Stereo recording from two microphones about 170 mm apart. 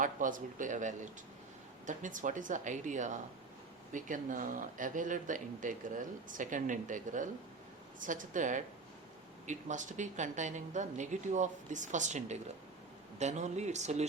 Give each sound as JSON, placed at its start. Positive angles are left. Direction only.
{"t": 0.0, "sound": "speech", "side_deg": -50}